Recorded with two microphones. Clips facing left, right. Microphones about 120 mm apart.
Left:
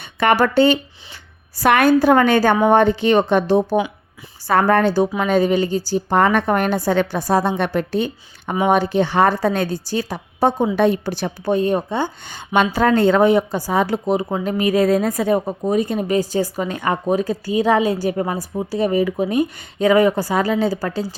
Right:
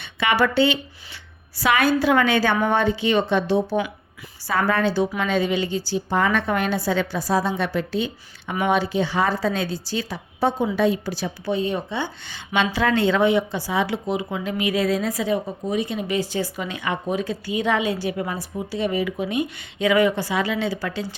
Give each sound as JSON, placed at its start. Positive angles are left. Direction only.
{"t": 0.0, "sound": "speech", "side_deg": 45}
{"t": 6.1, "sound": "a woman's voice", "side_deg": 60}
{"t": 10.8, "sound": "speech", "side_deg": 55}